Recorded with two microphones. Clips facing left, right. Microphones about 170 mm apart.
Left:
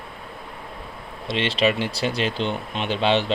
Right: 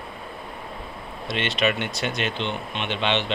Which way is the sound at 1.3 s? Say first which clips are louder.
Left 3 dB; 30° left (ahead or behind).